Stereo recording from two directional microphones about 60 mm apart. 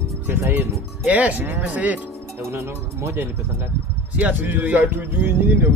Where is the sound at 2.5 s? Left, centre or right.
Right.